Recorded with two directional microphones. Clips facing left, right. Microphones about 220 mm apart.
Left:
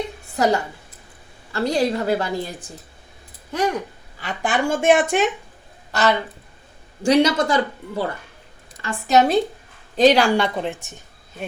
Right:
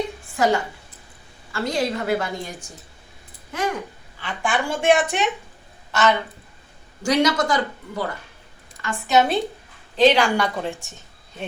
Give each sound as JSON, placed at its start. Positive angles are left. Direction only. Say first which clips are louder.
{"t": 0.3, "sound": "a woman's voice", "louder": "left 1 dB", "side_deg": 40}
{"t": 4.2, "sound": "a woman's voice", "louder": "left 3 dB", "side_deg": 40}
{"t": 5.9, "sound": "a woman's voice", "louder": "even", "side_deg": 35}